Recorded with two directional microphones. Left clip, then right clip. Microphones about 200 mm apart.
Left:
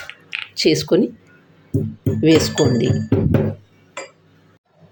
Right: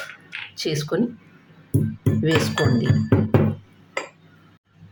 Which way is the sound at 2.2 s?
15° left (ahead or behind).